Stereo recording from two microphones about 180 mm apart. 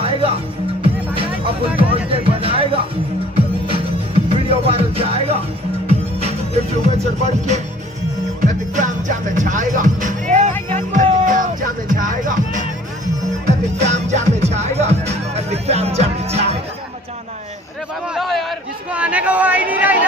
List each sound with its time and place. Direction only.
0.0 s music: 30° right (ahead or behind)
7.2 s speech: 40° right (ahead or behind)
8.7 s music: 45° right (ahead or behind)
18.0 s a sound: centre (ahead or behind)